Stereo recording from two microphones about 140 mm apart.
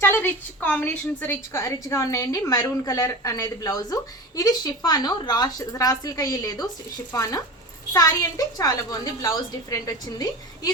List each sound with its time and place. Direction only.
0.0 s a woman's voice: 15° left (ahead or behind)